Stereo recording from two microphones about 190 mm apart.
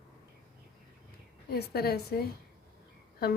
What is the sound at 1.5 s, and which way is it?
Speech, 55° left (ahead or behind).